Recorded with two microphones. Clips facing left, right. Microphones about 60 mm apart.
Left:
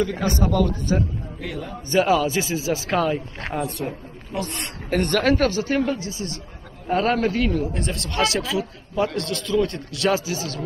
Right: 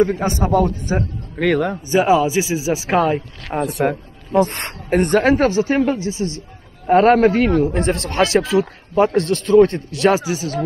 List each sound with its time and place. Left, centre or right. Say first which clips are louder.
0.0 s a man's voice: right 5 dB; right
1.4 s a man's voice: right 16 dB; right
1.9 s speech: right 3 dB; centre
2.9 s a man's voice: right 6 dB; right
4.3 s a man's voice: right 12 dB; right
4.8 s a man's voice: right 5 dB; right